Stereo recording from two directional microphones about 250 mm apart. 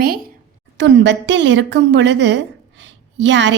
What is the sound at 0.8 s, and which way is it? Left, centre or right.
A woman's voice, right.